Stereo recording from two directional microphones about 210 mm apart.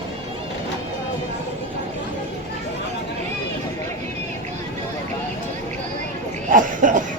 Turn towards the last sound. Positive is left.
turn(degrees=-40)  # may be behind; listen again after turning